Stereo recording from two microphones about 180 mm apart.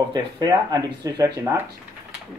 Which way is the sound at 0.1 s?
20° right (ahead or behind).